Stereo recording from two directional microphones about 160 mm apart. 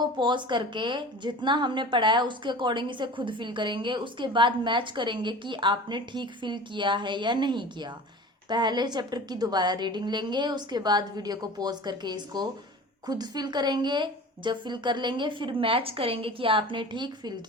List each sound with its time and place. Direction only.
0.0 s a woman's voice: 30° right (ahead or behind)